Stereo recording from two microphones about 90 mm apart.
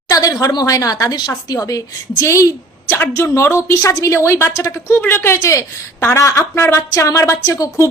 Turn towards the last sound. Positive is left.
turn(degrees=40)  # may be behind; listen again after turning